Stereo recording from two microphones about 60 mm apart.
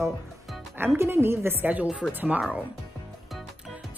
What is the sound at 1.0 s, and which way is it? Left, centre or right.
Speech, right.